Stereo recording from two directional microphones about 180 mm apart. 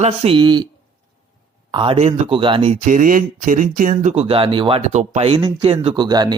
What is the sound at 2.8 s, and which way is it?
Speech, 50° right (ahead or behind).